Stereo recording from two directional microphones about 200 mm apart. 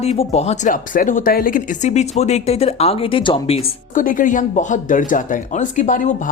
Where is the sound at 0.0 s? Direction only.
30° left (ahead or behind).